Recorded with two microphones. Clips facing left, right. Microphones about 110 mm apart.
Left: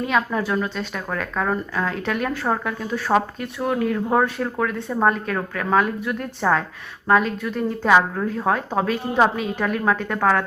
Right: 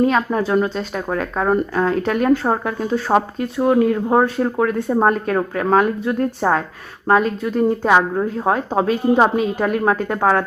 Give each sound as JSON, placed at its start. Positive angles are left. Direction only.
{"t": 0.3, "sound": "a woman's voice", "side_deg": -25}
{"t": 9.4, "sound": "speech", "side_deg": -35}